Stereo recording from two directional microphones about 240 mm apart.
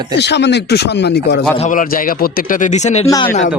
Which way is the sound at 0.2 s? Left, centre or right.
Left.